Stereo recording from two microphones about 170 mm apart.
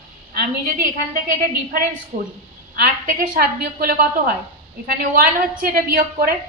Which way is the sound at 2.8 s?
55° right (ahead or behind).